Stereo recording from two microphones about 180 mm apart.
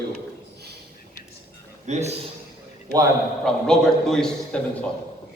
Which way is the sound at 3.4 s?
Centre (ahead or behind).